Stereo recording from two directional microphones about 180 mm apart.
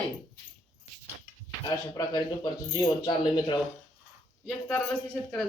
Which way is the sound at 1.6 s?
20° left (ahead or behind).